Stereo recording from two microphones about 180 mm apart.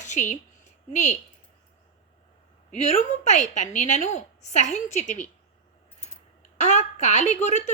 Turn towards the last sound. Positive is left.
turn(degrees=40)  # may be behind; listen again after turning